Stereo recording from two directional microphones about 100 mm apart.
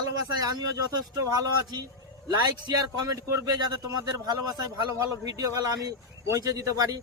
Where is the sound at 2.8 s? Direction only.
35° right (ahead or behind).